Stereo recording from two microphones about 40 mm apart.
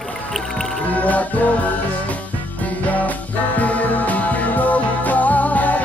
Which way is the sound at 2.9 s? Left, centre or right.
Left.